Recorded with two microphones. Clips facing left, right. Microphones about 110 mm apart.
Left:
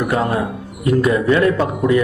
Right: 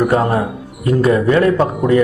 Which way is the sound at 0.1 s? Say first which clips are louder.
Right 3 dB; 35° right (ahead or behind).